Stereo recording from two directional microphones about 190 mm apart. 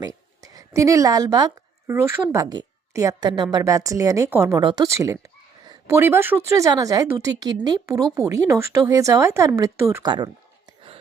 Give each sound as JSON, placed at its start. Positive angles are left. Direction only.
{"t": 0.0, "sound": "a woman's voice", "side_deg": -20}